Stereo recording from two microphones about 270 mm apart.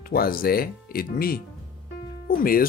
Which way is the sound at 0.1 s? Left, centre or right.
Left.